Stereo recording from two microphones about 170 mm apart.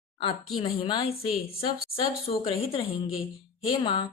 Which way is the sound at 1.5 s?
35° left (ahead or behind).